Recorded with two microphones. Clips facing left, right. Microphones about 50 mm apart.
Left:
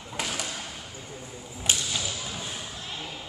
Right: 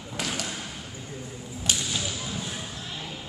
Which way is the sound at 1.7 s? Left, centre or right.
Left.